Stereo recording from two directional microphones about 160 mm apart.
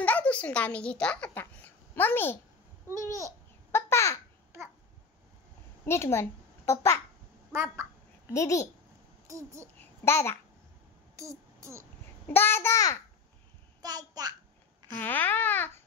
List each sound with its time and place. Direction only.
0.0 s a child's voice: 10° left (ahead or behind)
2.9 s speech: 20° right (ahead or behind)
3.7 s a child's voice: 15° left (ahead or behind)
5.9 s a child's voice: 15° left (ahead or behind)
7.5 s a child's voice: 15° right (ahead or behind)
8.3 s a child's voice: 20° left (ahead or behind)
9.3 s a child's voice: 20° right (ahead or behind)
9.8 s a sound: 15° left (ahead or behind)
11.1 s a sound: 20° right (ahead or behind)
12.3 s speech: 15° left (ahead or behind)
13.8 s a child's voice: 25° right (ahead or behind)
15.0 s speech: 10° left (ahead or behind)